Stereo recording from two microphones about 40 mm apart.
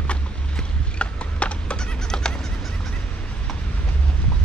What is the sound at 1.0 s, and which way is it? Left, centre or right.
Horse, left.